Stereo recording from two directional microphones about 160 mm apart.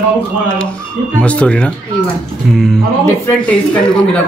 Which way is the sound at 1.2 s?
5° left (ahead or behind).